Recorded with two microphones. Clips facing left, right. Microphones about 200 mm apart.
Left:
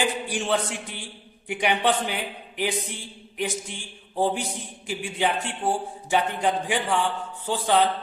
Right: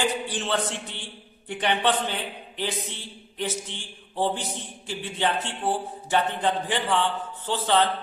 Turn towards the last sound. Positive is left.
turn(degrees=10)  # may be behind; listen again after turning